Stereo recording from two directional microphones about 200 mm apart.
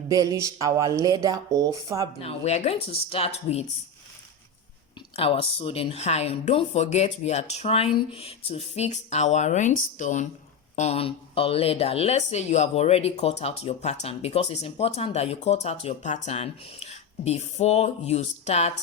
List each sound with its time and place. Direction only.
0.1 s speech: 15° right (ahead or behind)
2.2 s speech: 35° left (ahead or behind)
5.1 s speech: 30° left (ahead or behind)